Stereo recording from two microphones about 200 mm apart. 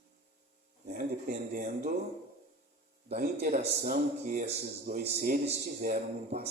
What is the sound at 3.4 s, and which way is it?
A man's voice, 45° right (ahead or behind).